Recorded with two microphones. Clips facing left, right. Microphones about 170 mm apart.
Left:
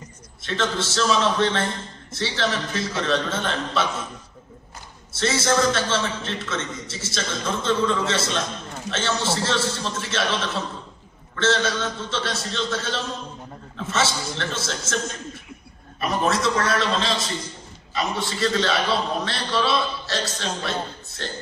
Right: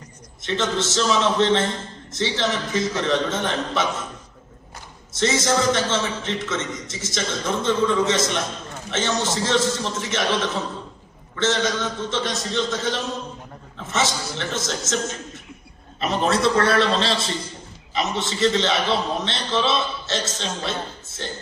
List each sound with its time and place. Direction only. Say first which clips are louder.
0.4 s a man's voice: right 2 dB; 20° right (ahead or behind)
5.1 s a man's voice: right 1 dB; 20° right (ahead or behind)
16.0 s a man's voice: right 2 dB; 25° right (ahead or behind)